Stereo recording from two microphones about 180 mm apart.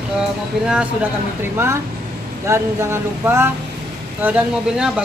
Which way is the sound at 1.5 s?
15° right (ahead or behind).